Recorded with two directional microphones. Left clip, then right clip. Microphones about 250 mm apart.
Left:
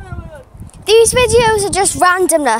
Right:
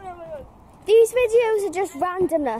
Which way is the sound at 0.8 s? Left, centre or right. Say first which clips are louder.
Left 6 dB; centre.